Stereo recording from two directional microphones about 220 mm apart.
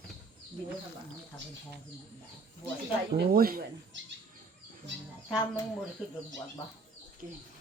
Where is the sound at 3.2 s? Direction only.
40° right (ahead or behind).